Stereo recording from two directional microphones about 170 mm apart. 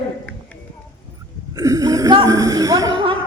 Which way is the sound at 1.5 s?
20° right (ahead or behind).